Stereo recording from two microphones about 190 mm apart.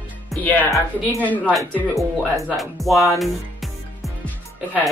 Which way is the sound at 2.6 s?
Centre (ahead or behind).